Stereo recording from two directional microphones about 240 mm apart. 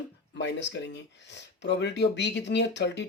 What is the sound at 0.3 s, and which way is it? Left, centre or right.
Speech, left.